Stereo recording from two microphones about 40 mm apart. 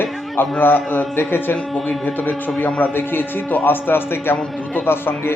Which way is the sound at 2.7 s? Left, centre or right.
Left.